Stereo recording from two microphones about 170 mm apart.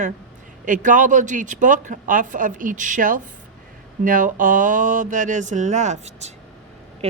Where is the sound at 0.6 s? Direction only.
50° right (ahead or behind).